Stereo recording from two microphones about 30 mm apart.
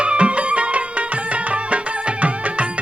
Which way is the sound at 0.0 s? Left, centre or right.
Right.